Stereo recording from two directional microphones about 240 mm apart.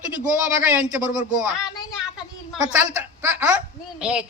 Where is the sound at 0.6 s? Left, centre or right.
Centre.